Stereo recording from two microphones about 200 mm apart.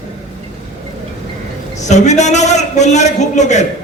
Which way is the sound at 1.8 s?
35° left (ahead or behind).